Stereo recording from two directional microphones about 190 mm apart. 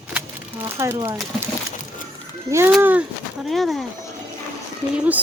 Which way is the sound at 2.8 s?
10° right (ahead or behind).